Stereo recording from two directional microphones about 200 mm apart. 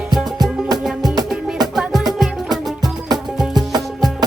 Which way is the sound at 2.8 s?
20° right (ahead or behind).